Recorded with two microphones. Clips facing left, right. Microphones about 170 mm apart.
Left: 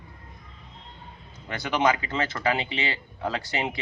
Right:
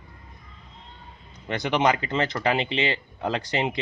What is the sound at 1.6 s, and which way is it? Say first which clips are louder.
Speech: right 1 dB; 20° right (ahead or behind).